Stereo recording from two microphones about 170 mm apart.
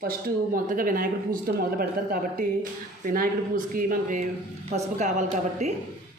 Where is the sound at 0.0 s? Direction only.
55° right (ahead or behind).